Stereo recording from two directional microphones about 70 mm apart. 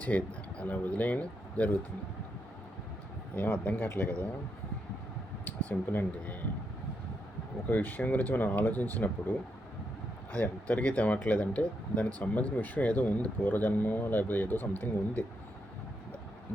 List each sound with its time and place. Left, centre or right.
0.0 s speech: left
3.3 s speech: left
5.5 s speech: left
7.7 s speech: left
10.3 s speech: left